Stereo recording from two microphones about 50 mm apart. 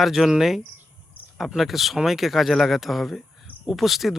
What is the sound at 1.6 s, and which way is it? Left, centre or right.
A man's voice, centre.